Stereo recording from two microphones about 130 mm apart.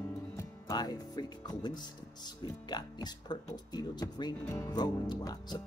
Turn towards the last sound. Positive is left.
turn(degrees=30)  # may be behind; listen again after turning